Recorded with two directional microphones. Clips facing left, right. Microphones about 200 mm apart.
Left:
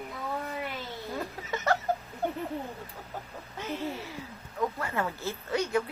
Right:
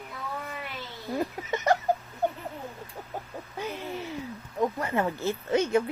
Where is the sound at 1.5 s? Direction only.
15° right (ahead or behind).